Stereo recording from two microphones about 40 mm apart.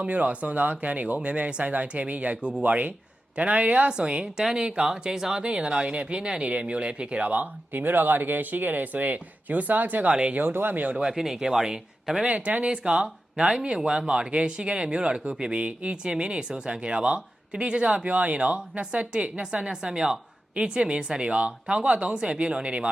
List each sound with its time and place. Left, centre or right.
0.0 s speech: right
5.1 s speech: centre
5.4 s speech: right
7.7 s speech: right
10.1 s speech: right
10.3 s speech: right
11.1 s speech: centre
12.2 s speech: right
12.6 s speech: right
20.6 s speech: right